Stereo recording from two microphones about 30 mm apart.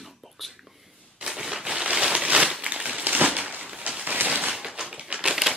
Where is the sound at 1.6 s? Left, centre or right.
Right.